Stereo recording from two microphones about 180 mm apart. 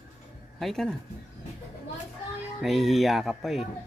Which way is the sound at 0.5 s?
Centre (ahead or behind).